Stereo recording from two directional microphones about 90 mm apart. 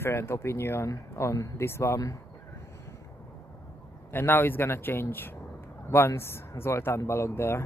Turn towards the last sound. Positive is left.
turn(degrees=30)  # may be behind; listen again after turning